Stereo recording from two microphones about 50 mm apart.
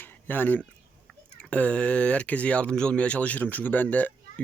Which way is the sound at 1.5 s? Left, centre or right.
Left.